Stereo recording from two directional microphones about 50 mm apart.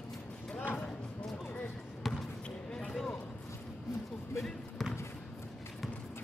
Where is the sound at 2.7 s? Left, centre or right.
Centre.